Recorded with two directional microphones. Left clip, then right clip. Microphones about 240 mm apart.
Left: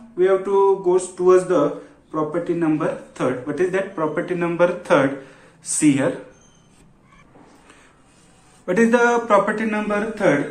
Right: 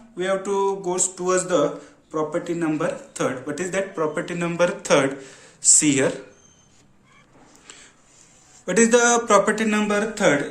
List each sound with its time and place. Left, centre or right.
0.2 s speech: right
8.6 s speech: right